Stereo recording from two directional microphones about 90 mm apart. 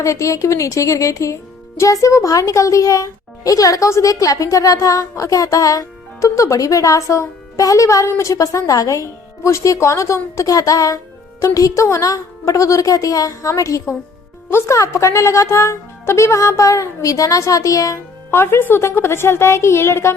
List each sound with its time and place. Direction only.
0.0 s a child's voice: 35° left (ahead or behind)
18.3 s a woman's voice: 25° left (ahead or behind)